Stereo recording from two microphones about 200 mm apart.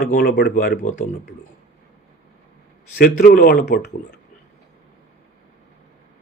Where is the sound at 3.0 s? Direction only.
50° left (ahead or behind).